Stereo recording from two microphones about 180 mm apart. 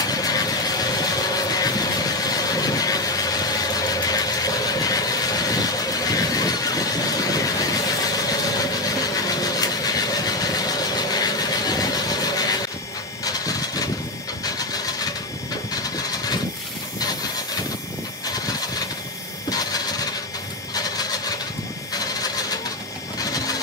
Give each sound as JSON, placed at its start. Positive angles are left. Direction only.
{"t": 0.0, "sound": "vehicle", "side_deg": 20}
{"t": 13.2, "sound": "printer", "side_deg": 20}
{"t": 14.4, "sound": "engine", "side_deg": 20}
{"t": 19.5, "sound": "engine", "side_deg": 20}
{"t": 20.7, "sound": "vehicle", "side_deg": 20}